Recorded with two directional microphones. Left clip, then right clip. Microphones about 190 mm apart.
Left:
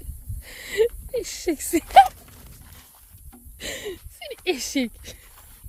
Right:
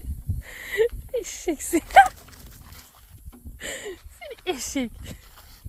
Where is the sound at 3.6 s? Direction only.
20° left (ahead or behind).